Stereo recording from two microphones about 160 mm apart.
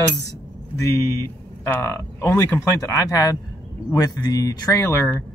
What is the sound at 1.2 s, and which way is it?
Speech, 15° left (ahead or behind).